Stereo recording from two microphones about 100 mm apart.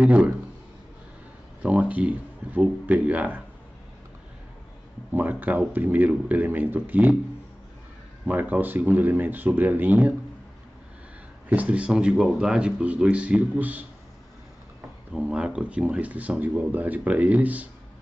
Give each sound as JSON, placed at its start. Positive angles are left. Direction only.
{"t": 0.0, "sound": "speech", "side_deg": -10}
{"t": 1.6, "sound": "speech", "side_deg": -15}
{"t": 5.1, "sound": "speech", "side_deg": -15}
{"t": 8.3, "sound": "speech", "side_deg": -20}
{"t": 11.4, "sound": "speech", "side_deg": -15}
{"t": 15.1, "sound": "speech", "side_deg": -10}